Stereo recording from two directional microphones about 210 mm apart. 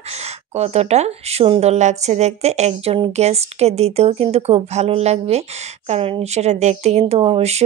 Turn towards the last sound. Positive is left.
turn(degrees=-30)  # may be behind; listen again after turning